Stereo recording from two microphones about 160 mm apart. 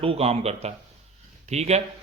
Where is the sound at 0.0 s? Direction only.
40° right (ahead or behind).